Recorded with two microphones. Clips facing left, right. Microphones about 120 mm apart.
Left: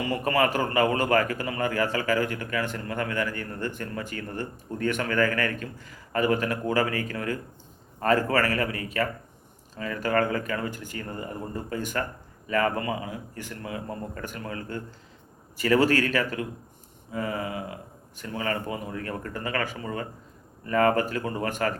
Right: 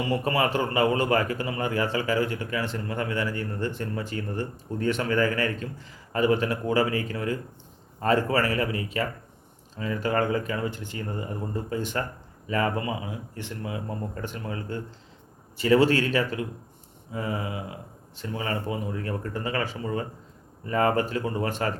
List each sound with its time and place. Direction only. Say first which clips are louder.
0.0 s a man's voice: even; 30° right (ahead or behind)